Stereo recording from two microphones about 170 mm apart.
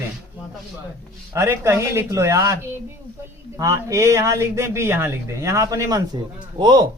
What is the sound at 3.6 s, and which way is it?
A man's voice, 20° right (ahead or behind).